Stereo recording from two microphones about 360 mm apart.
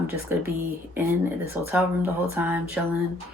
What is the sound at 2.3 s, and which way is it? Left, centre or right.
Speech, centre.